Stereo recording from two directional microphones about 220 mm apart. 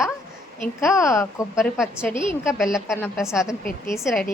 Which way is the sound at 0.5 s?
10° left (ahead or behind).